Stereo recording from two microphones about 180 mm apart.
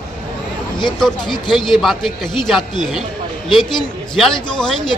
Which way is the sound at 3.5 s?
25° left (ahead or behind).